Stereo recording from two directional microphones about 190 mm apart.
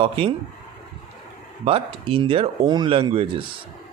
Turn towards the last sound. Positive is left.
turn(degrees=-25)  # may be behind; listen again after turning